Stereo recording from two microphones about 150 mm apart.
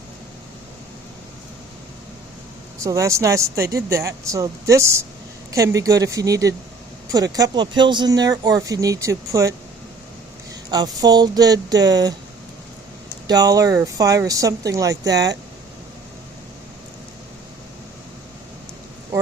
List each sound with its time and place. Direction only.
2.7 s speech: 20° right (ahead or behind)
10.7 s speech: 25° right (ahead or behind)
13.2 s speech: 25° right (ahead or behind)